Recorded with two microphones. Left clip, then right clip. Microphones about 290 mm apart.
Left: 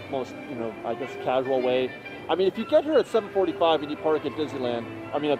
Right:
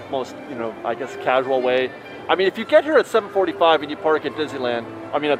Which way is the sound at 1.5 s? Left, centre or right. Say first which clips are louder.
Right 5 dB; centre.